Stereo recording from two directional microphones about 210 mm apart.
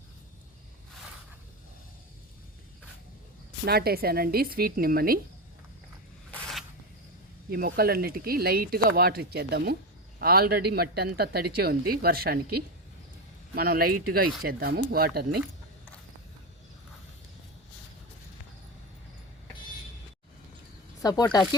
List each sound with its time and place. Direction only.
3.7 s speech: 45° right (ahead or behind)
6.3 s a sound: centre (ahead or behind)
7.5 s speech: 45° right (ahead or behind)
13.6 s speech: 45° right (ahead or behind)
21.0 s speech: 15° left (ahead or behind)